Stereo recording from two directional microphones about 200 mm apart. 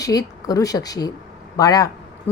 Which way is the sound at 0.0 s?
20° left (ahead or behind).